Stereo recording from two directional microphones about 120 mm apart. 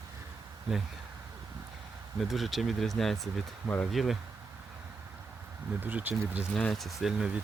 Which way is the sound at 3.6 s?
15° left (ahead or behind).